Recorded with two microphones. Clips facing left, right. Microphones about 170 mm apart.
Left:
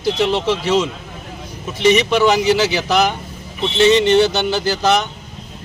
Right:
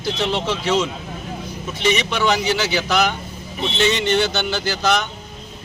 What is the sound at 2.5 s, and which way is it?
Speech, 35° left (ahead or behind).